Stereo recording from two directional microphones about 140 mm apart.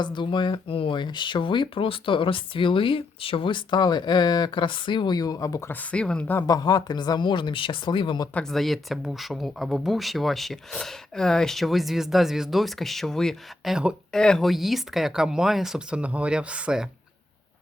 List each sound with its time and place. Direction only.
0.0 s speech: 35° left (ahead or behind)
5.9 s speech: 10° left (ahead or behind)
6.5 s speech: 30° left (ahead or behind)
8.3 s speech: 5° left (ahead or behind)